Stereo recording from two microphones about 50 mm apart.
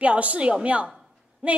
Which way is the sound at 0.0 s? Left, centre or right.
Right.